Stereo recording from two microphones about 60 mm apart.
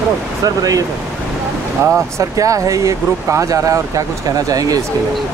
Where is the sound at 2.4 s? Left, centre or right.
Right.